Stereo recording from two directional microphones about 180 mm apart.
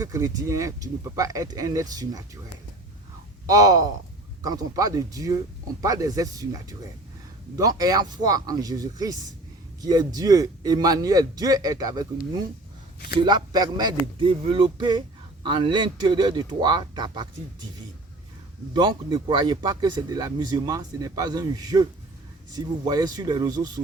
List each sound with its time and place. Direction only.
0.0 s speech: 20° right (ahead or behind)
3.4 s speech: 20° right (ahead or behind)
13.2 s speech: 20° right (ahead or behind)
18.7 s speech: 25° right (ahead or behind)